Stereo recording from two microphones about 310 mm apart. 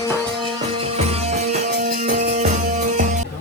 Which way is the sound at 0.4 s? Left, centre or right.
Centre.